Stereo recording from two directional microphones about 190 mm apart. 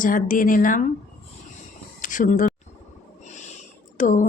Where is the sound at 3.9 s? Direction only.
40° left (ahead or behind).